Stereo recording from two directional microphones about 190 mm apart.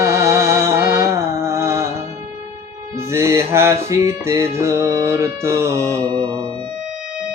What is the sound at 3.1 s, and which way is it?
Music, 15° right (ahead or behind).